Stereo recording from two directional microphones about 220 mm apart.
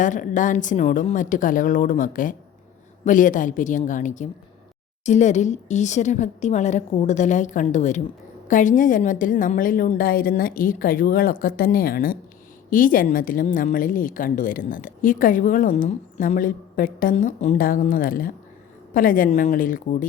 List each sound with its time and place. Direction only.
0.0 s a woman's voice: 35° left (ahead or behind)